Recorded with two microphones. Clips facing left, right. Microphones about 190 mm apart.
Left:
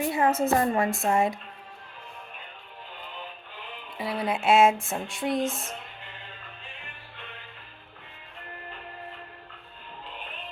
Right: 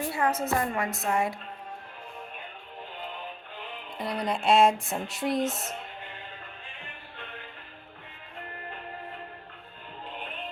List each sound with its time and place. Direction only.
0.0 s a woman's voice: 20° left (ahead or behind)
3.9 s music: 5° left (ahead or behind)
5.4 s speech: 20° right (ahead or behind)